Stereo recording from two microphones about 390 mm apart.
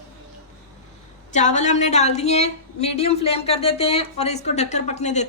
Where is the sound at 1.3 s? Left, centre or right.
Centre.